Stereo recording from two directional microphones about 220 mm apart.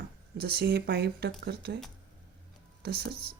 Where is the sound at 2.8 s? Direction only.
45° right (ahead or behind).